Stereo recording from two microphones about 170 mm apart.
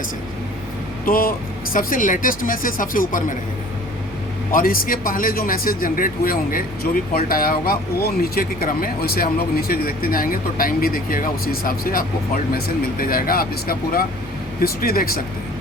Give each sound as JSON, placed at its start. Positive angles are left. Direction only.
{"t": 1.0, "sound": "a man's voice", "side_deg": 60}
{"t": 4.5, "sound": "a man's voice", "side_deg": 55}